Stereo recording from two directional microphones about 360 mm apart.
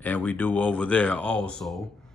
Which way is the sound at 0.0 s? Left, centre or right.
Centre.